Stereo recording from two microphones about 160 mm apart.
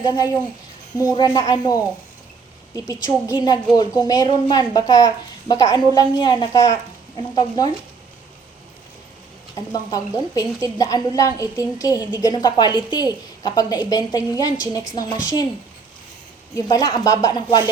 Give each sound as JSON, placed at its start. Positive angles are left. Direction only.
{"t": 0.0, "sound": "a woman's voice", "side_deg": 30}
{"t": 9.7, "sound": "a woman's voice", "side_deg": 25}
{"t": 16.6, "sound": "a woman's voice", "side_deg": 25}